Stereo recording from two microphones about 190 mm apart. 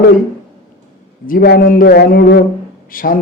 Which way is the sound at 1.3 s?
50° left (ahead or behind).